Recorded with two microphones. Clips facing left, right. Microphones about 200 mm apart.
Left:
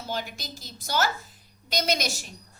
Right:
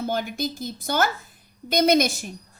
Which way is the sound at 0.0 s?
55° right (ahead or behind).